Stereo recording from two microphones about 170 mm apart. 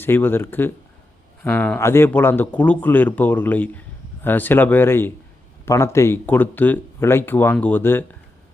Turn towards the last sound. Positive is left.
turn(degrees=10)  # may be behind; listen again after turning